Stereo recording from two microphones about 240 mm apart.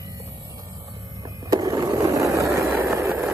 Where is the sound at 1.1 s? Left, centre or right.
Centre.